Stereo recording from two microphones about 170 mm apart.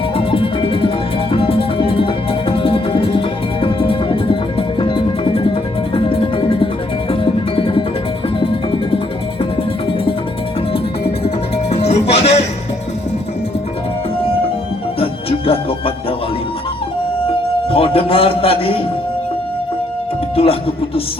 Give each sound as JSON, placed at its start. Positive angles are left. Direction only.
{"t": 0.2, "sound": "music", "side_deg": 30}
{"t": 11.2, "sound": "music", "side_deg": 35}
{"t": 14.9, "sound": "music", "side_deg": 35}
{"t": 17.7, "sound": "a sound", "side_deg": 35}
{"t": 20.3, "sound": "music", "side_deg": 35}